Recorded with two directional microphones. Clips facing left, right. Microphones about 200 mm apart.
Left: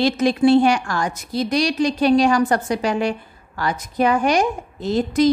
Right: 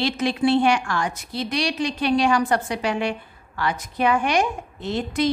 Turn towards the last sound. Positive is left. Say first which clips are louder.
# left 6 dB
turn(degrees=40)  # may be behind; listen again after turning